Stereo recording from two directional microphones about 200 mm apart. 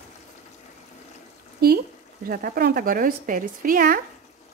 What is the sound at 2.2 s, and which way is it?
Speech, 45° right (ahead or behind).